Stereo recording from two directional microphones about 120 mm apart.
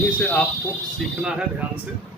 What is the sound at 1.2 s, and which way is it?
Speech, 5° right (ahead or behind).